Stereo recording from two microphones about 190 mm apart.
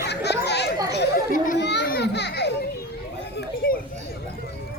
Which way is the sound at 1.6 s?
65° left (ahead or behind).